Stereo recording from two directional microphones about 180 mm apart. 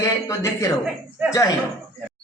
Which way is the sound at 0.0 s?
20° left (ahead or behind).